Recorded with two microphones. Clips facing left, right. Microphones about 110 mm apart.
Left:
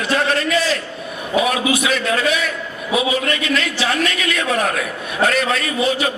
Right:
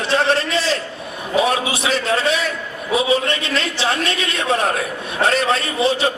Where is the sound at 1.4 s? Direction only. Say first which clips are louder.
Left 1 dB; 30° right (ahead or behind).